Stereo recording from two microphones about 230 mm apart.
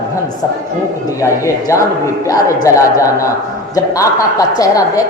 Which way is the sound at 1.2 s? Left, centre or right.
Centre.